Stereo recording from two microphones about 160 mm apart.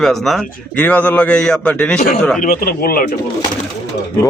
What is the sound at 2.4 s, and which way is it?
Speech, 65° left (ahead or behind).